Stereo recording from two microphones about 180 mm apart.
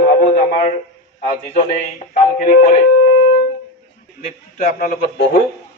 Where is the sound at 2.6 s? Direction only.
40° left (ahead or behind).